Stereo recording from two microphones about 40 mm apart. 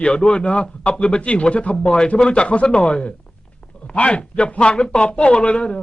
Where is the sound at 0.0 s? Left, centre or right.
Left.